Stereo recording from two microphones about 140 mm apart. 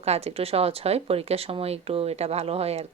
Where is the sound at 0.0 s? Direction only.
50° right (ahead or behind).